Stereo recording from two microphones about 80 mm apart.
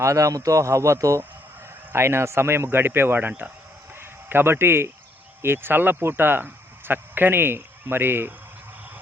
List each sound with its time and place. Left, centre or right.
0.0 s speech: right